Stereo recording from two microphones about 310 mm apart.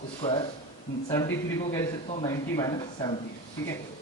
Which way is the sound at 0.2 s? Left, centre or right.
Centre.